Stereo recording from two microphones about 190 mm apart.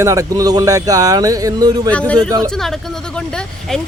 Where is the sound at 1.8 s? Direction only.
5° left (ahead or behind).